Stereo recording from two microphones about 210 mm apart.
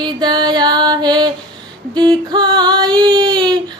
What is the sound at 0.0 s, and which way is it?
Music, 20° right (ahead or behind).